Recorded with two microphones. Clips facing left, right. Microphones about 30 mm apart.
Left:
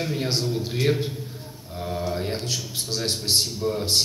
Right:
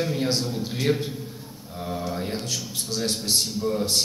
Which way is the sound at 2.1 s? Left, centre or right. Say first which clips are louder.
Left 4 dB; left.